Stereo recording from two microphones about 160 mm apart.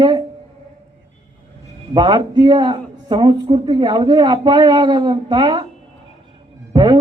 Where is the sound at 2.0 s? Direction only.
30° right (ahead or behind).